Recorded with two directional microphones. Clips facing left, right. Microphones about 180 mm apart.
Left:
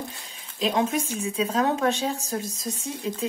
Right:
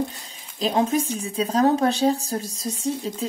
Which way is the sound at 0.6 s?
35° right (ahead or behind).